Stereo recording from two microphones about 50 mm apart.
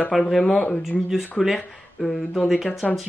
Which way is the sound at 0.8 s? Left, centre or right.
Centre.